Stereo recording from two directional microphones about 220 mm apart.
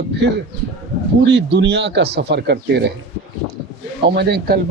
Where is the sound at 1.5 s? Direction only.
50° right (ahead or behind).